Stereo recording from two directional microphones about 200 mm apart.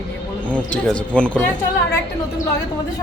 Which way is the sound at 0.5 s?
5° left (ahead or behind).